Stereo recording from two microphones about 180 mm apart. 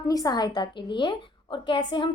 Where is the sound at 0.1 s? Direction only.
20° left (ahead or behind).